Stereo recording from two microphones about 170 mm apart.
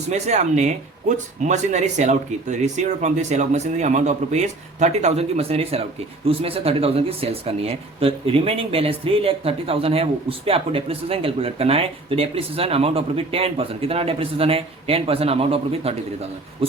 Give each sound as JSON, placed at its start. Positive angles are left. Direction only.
{"t": 0.1, "sound": "speech", "side_deg": -40}